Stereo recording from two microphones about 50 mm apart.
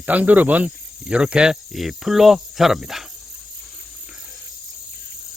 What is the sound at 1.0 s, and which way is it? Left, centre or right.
Cricket, centre.